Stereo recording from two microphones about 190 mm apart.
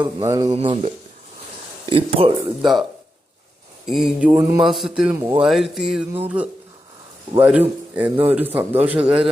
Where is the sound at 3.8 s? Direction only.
Centre (ahead or behind).